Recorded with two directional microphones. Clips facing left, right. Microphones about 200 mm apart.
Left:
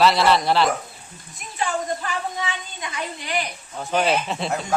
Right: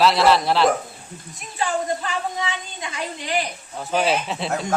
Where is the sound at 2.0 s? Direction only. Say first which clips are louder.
Right 1 dB; 25° right (ahead or behind).